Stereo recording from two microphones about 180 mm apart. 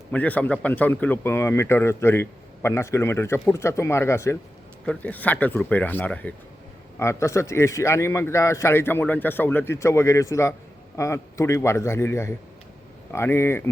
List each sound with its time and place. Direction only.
0.1 s speech: 10° left (ahead or behind)